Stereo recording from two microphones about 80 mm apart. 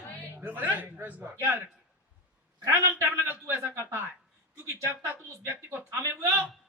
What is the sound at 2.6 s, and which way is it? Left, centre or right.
A man's voice, right.